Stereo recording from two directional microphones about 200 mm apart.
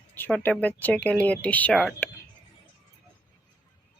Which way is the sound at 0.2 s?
5° left (ahead or behind).